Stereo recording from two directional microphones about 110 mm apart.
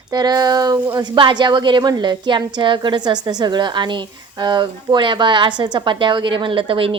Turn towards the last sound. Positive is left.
turn(degrees=-55)  # may be behind; listen again after turning